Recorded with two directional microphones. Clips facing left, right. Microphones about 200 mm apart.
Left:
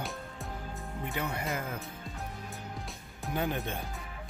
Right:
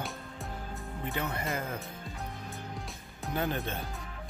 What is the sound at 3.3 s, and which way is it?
Speech, 15° left (ahead or behind).